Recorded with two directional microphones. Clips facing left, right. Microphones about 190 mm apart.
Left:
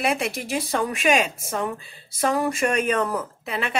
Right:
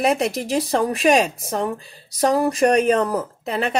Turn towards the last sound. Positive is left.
turn(degrees=-40)  # may be behind; listen again after turning